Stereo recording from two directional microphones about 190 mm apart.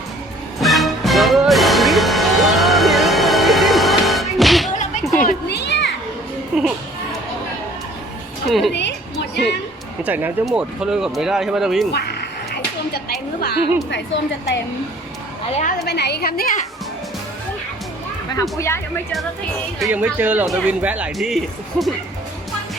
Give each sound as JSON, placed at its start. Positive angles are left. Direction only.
{"t": 0.6, "sound": "music", "side_deg": 0}
{"t": 5.2, "sound": "a sound", "side_deg": 55}
{"t": 6.5, "sound": "music", "side_deg": -5}
{"t": 8.4, "sound": "speech", "side_deg": 0}
{"t": 10.0, "sound": "speech", "side_deg": -10}
{"t": 11.9, "sound": "a sound", "side_deg": 60}
{"t": 13.9, "sound": "a woman's voice", "side_deg": 65}
{"t": 15.9, "sound": "a woman's voice", "side_deg": 60}
{"t": 18.5, "sound": "speech", "side_deg": 15}
{"t": 19.8, "sound": "a man's voice", "side_deg": -10}